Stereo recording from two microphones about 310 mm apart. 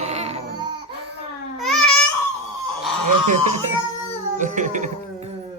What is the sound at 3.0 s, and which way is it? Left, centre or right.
Speech, right.